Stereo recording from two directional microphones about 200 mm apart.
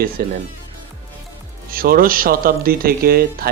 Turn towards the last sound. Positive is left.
turn(degrees=-50)  # may be behind; listen again after turning